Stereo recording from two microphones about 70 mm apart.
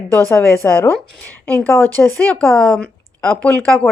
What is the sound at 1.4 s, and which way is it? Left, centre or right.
Speech, centre.